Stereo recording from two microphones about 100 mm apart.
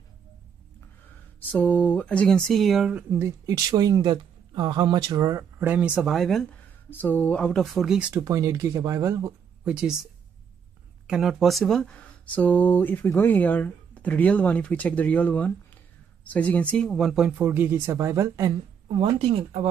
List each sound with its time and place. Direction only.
1.5 s speech: 15° left (ahead or behind); by 2.9 s centre (ahead or behind)
2.9 s speech: 15° right (ahead or behind)
3.2 s speech: 30° right (ahead or behind)
5.6 s speech: 15° right (ahead or behind)
5.9 s speech: centre (ahead or behind)
6.5 s speech: 15° left (ahead or behind); by 8.1 s 5° right (ahead or behind)
8.2 s speech: 35° right (ahead or behind)
9.7 s speech: 5° right (ahead or behind)
11.1 s speech: 5° right (ahead or behind)
17.4 s speech: 20° right (ahead or behind)
18.9 s speech: 65° right (ahead or behind)